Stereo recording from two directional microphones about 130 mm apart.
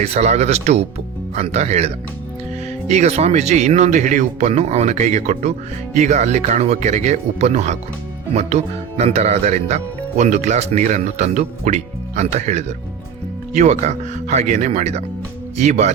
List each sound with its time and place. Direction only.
0.0 s speech: 55° right (ahead or behind)